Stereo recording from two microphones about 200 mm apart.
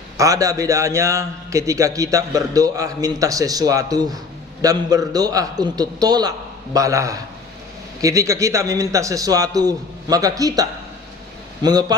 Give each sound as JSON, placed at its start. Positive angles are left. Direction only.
{"t": 0.2, "sound": "a man's voice", "side_deg": -15}